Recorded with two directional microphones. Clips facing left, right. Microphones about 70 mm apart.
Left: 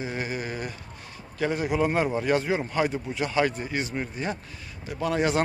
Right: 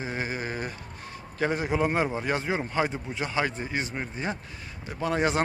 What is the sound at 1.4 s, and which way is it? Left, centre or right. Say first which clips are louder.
Speech: left 1 dB; right.